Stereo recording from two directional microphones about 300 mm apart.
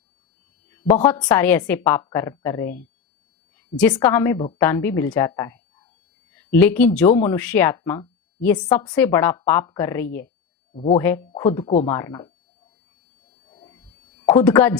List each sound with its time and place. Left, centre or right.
1.0 s speech: centre
13.5 s a sound: centre
14.3 s speech: centre